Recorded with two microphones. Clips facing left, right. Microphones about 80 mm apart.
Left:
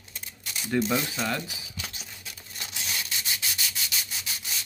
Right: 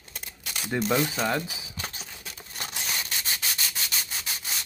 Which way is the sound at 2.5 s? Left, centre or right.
Right.